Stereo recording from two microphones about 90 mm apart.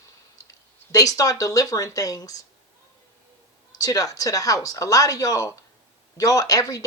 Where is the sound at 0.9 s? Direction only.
40° left (ahead or behind).